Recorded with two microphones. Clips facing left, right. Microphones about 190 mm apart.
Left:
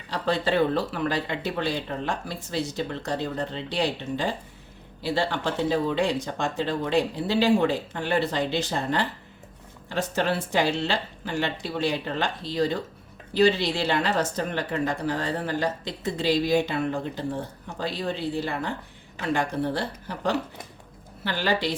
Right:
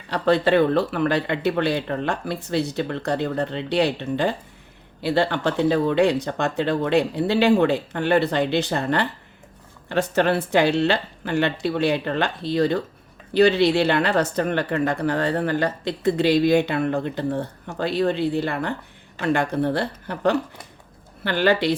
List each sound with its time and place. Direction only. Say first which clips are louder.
0.1 s speech: right 6 dB; 60° right (ahead or behind)